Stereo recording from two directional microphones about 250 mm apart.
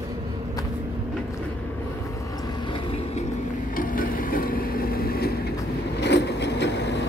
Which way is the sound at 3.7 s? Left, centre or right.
Left.